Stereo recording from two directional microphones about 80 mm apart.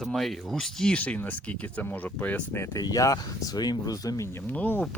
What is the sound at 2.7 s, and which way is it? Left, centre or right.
Speech, left.